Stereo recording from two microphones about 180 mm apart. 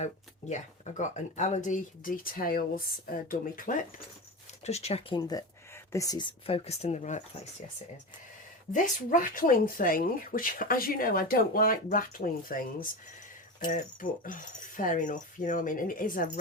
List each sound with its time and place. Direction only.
0.0 s speech: 40° left (ahead or behind)
4.6 s speech: 35° left (ahead or behind)
8.7 s speech: 50° left (ahead or behind)